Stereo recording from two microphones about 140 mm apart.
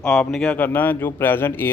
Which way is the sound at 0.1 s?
5° left (ahead or behind).